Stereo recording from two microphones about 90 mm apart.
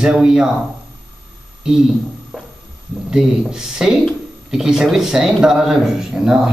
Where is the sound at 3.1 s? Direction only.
5° right (ahead or behind).